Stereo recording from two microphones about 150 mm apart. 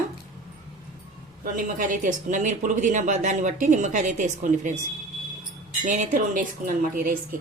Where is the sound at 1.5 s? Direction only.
65° right (ahead or behind).